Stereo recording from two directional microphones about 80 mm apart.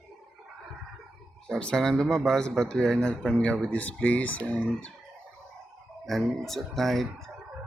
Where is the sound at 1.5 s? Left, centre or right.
Centre.